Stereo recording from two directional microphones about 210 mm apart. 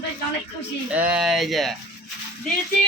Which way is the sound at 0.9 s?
5° right (ahead or behind).